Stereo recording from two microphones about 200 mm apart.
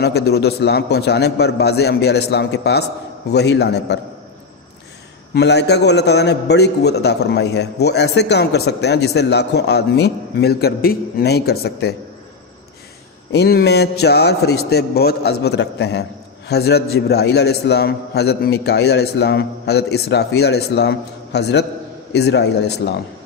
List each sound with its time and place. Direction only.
0.0 s a man's voice: 55° left (ahead or behind)
5.3 s a man's voice: 55° left (ahead or behind)
13.3 s a man's voice: 55° left (ahead or behind)